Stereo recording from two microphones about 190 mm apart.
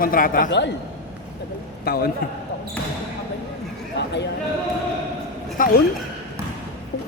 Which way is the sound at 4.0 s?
65° left (ahead or behind).